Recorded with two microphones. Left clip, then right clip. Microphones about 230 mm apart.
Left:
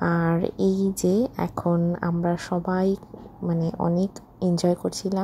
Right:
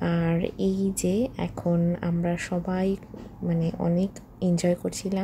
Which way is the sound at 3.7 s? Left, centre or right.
Centre.